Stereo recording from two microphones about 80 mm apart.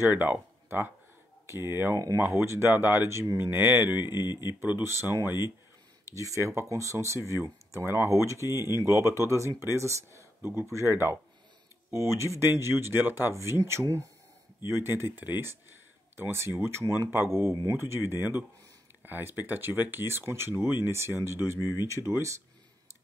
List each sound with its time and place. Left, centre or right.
0.0 s speech: right
4.0 s speech: left
4.8 s speech: right
6.0 s speech: right
21.5 s speech: left
21.8 s speech: right